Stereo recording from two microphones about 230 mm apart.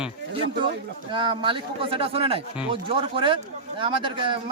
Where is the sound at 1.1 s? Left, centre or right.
Right.